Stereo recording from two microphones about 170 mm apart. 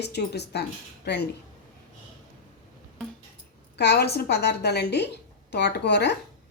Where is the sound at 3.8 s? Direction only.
75° left (ahead or behind).